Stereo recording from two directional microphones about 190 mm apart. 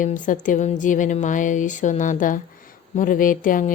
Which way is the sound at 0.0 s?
45° left (ahead or behind).